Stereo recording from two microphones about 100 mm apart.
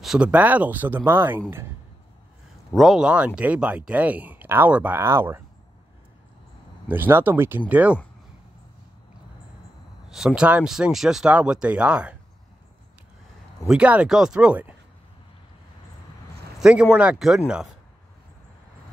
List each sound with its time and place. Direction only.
0.0 s speech: 5° right (ahead or behind)
0.3 s speech: 15° right (ahead or behind)
2.7 s speech: centre (ahead or behind); by 5.4 s 25° right (ahead or behind)
6.9 s speech: 20° right (ahead or behind)
10.0 s speech: 5° right (ahead or behind)
13.7 s speech: 10° right (ahead or behind)
16.5 s speech: 10° right (ahead or behind)